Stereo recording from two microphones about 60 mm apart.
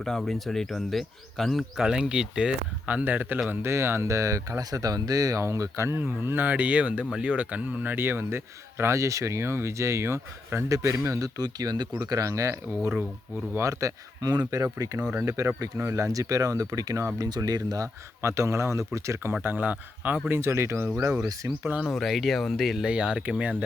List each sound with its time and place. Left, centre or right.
0.0 s speech: centre
2.8 s speech: right
3.5 s speech: right
5.5 s speech: right
7.9 s speech: right
8.8 s speech: right
11.2 s speech: right
15.2 s speech: right
17.2 s speech: right
18.2 s speech: right
19.4 s speech: right
20.4 s speech: right
21.8 s speech: centre
22.8 s speech: centre